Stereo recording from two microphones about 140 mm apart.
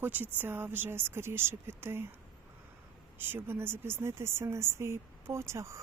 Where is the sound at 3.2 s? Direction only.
15° right (ahead or behind).